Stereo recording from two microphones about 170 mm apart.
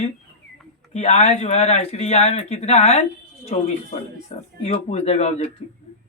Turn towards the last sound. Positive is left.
turn(degrees=40)  # may be behind; listen again after turning